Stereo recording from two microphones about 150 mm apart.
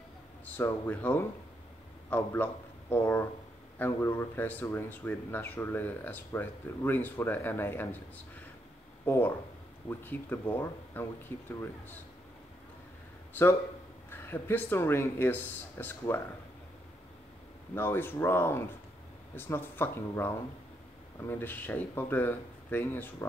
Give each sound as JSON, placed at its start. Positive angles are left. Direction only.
{"t": 0.5, "sound": "a man's voice", "side_deg": 10}
{"t": 14.1, "sound": "speech", "side_deg": 15}
{"t": 17.7, "sound": "speech", "side_deg": 15}